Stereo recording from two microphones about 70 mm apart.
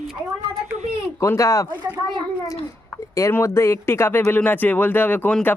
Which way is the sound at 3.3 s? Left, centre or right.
Left.